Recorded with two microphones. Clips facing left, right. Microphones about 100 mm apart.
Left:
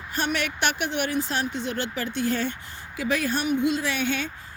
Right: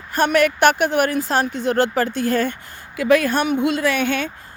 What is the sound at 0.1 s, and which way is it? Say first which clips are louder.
Speech: right 11 dB; 50° right (ahead or behind).